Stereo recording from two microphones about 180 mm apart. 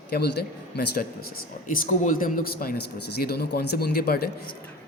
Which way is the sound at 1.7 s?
45° left (ahead or behind).